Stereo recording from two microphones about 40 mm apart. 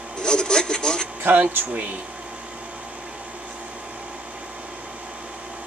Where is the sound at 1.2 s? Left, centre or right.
Right.